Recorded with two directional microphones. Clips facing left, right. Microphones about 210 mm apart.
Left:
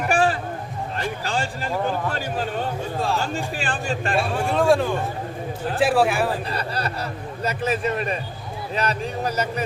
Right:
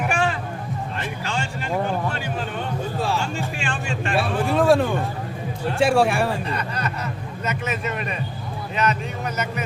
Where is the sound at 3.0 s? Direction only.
Centre (ahead or behind).